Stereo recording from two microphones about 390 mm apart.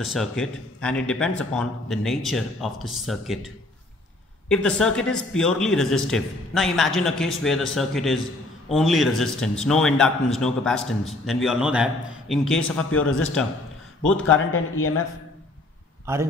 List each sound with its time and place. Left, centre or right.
0.0 s a man's voice: centre
14.3 s speech: left